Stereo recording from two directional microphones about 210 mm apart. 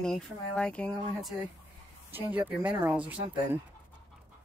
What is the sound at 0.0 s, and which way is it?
Speech, 5° left (ahead or behind).